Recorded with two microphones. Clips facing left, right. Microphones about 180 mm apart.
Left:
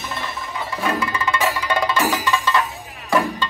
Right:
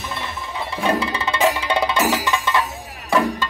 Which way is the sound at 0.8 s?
25° right (ahead or behind).